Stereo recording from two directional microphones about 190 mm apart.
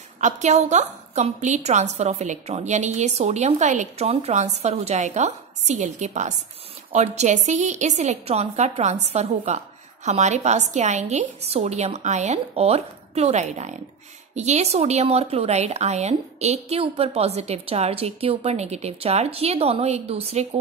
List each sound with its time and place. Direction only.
0.2 s a woman's voice: 35° right (ahead or behind)